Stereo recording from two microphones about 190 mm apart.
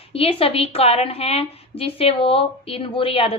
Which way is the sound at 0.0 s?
30° left (ahead or behind).